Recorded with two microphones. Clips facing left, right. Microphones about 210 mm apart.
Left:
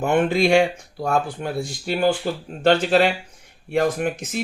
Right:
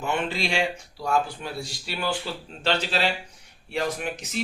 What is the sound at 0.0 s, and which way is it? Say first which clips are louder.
Speech: left 9 dB; 50° left (ahead or behind).